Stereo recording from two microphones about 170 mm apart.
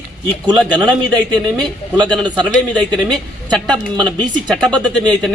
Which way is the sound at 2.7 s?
Centre (ahead or behind).